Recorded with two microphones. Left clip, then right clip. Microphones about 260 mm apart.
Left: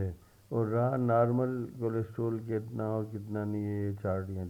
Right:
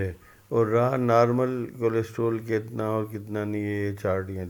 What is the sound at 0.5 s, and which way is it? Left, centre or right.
A man's voice, right.